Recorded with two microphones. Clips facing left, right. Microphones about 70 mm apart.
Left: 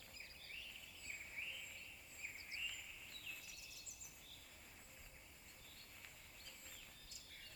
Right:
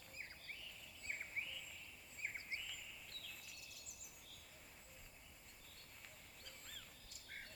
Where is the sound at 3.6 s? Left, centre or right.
Right.